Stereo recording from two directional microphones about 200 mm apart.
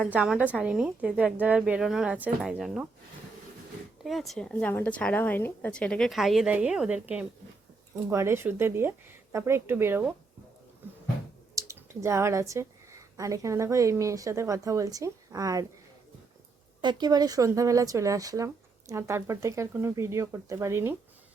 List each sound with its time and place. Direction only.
0.0 s a woman's voice: 5° right (ahead or behind)
4.0 s a woman's voice: centre (ahead or behind)
11.5 s speech: 15° right (ahead or behind)
16.8 s speech: 20° right (ahead or behind)